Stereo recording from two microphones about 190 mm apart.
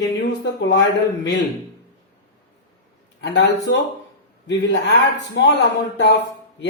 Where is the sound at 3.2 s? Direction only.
65° left (ahead or behind).